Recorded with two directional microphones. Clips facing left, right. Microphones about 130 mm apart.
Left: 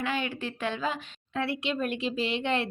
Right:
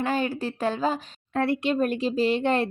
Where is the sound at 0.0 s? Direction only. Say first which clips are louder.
Right 5 dB; 40° right (ahead or behind).